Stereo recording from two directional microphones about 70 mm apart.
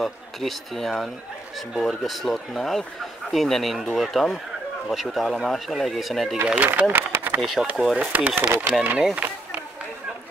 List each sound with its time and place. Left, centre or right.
0.0 s speech: centre
6.4 s speech: centre
7.1 s a sound: right
7.7 s speech: centre
8.0 s speech: right